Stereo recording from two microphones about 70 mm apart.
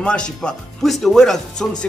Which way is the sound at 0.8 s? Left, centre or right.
Centre.